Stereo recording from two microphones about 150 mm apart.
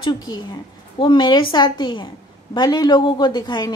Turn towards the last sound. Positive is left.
turn(degrees=30)  # may be behind; listen again after turning